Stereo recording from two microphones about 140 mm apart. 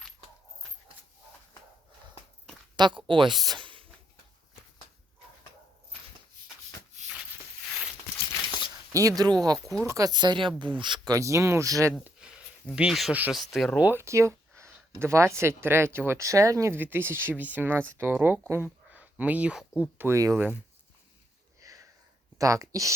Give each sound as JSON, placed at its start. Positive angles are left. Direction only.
{"t": 2.7, "sound": "speech", "side_deg": -35}
{"t": 3.4, "sound": "a sound", "side_deg": -35}
{"t": 8.9, "sound": "speech", "side_deg": -25}
{"t": 12.7, "sound": "speech", "side_deg": -5}
{"t": 13.8, "sound": "speech", "side_deg": -15}
{"t": 21.6, "sound": "sniff", "side_deg": -25}
{"t": 22.4, "sound": "speech", "side_deg": -20}